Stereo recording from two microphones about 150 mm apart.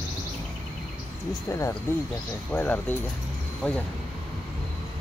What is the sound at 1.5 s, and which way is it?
Speech, 20° left (ahead or behind).